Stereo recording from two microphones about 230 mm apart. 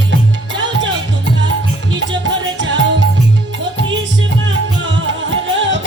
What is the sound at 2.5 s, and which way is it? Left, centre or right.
Music, right.